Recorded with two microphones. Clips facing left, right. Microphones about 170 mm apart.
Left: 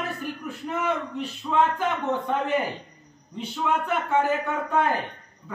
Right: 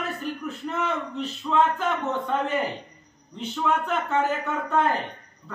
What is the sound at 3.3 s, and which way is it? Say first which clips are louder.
A man's voice: right 1 dB; 10° left (ahead or behind).